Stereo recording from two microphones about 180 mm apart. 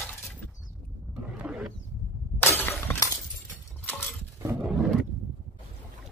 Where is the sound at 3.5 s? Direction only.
10° left (ahead or behind).